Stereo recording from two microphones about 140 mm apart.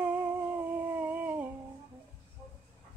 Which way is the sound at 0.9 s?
10° right (ahead or behind).